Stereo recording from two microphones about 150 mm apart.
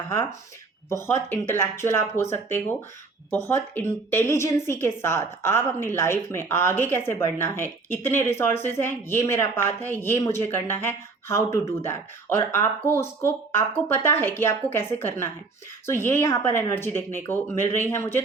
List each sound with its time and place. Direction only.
0.1 s a woman's voice: 15° left (ahead or behind)